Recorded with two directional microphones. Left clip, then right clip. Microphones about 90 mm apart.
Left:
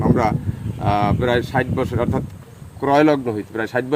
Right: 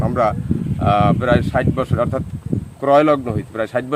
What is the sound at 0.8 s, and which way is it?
Speech, 25° right (ahead or behind).